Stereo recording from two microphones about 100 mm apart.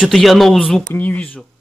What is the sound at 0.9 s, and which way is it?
Speech, 15° left (ahead or behind).